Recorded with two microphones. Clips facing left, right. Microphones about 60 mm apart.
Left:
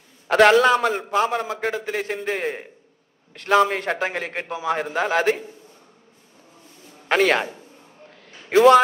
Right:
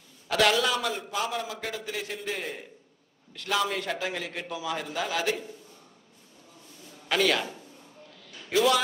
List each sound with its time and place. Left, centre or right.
0.3 s a man's voice: left
7.1 s a man's voice: left
8.1 s a sound: left